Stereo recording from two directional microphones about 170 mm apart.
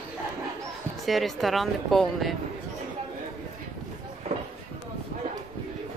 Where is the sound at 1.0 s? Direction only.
Centre (ahead or behind).